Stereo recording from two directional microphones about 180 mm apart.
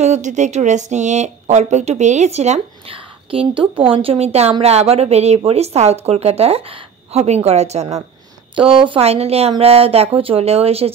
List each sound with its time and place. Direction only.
0.0 s speech: 40° right (ahead or behind)